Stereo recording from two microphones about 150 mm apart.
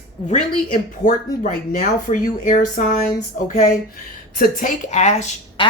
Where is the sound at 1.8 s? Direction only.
60° left (ahead or behind).